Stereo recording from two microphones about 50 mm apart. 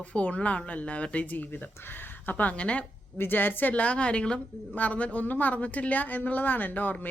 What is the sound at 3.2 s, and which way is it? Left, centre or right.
Speech, left.